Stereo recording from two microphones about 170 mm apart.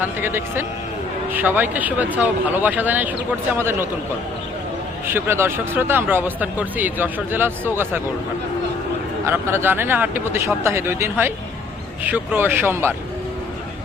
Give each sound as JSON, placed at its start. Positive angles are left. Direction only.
{"t": 0.0, "sound": "speech", "side_deg": -15}
{"t": 5.0, "sound": "speech", "side_deg": -10}
{"t": 9.2, "sound": "speech", "side_deg": -15}